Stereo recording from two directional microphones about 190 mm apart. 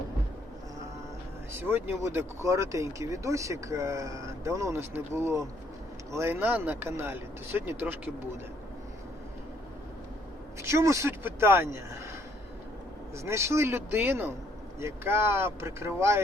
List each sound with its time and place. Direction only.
1.5 s speech: 10° right (ahead or behind)
10.6 s speech: 15° right (ahead or behind)
13.2 s speech: 15° right (ahead or behind)